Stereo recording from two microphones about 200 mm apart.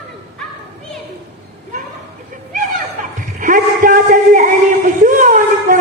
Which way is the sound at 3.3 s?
40° right (ahead or behind).